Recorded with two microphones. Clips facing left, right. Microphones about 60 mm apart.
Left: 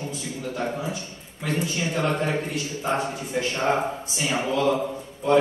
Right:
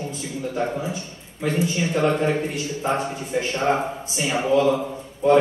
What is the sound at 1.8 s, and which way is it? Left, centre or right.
A man's voice, right.